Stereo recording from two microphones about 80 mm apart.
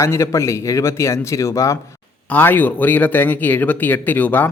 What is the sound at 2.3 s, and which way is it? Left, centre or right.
Speech, left.